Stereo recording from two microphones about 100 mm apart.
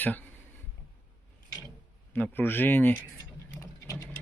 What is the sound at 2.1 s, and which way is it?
Speech, 20° left (ahead or behind).